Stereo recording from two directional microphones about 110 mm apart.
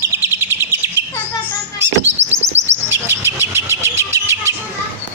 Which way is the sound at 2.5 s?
80° right.